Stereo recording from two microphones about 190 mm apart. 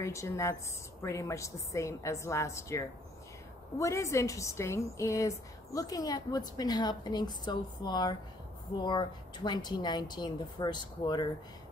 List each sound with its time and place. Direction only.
0.0 s a woman's voice: 15° left (ahead or behind)